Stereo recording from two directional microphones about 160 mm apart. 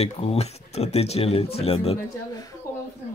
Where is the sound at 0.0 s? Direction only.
40° left (ahead or behind).